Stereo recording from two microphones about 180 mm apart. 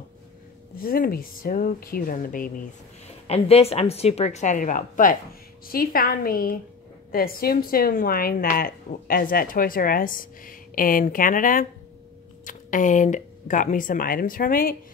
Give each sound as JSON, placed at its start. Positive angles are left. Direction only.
{"t": 0.7, "sound": "a woman's voice", "side_deg": 55}
{"t": 3.3, "sound": "a woman's voice", "side_deg": 35}